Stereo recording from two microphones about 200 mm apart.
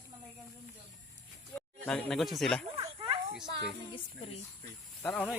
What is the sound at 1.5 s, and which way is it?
Speech, 5° left (ahead or behind).